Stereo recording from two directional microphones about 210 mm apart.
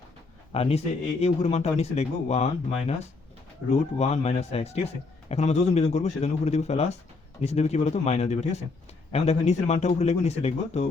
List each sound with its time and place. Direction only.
0.5 s speech: 30° left (ahead or behind)